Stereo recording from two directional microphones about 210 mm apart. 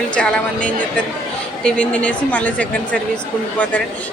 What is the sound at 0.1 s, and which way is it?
A woman's voice, 5° left (ahead or behind).